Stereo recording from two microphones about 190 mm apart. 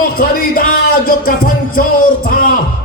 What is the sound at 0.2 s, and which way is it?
Music, 50° left (ahead or behind).